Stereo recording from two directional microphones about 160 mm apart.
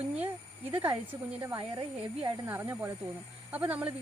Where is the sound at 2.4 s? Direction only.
15° right (ahead or behind).